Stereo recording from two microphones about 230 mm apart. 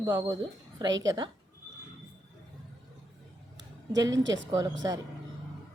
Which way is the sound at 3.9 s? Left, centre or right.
Centre.